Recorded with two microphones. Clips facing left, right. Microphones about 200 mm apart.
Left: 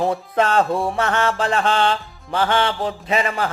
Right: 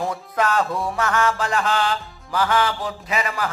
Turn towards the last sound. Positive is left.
turn(degrees=25)  # may be behind; listen again after turning